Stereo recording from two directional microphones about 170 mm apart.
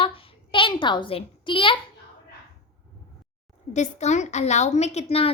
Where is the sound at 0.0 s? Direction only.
35° left (ahead or behind).